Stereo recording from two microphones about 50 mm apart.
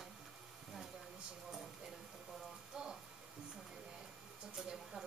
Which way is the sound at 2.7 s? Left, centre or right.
Centre.